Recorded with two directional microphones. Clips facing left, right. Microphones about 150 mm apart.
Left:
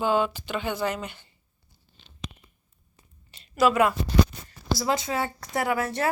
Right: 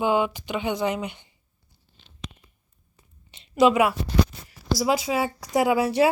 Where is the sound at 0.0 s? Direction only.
15° right (ahead or behind).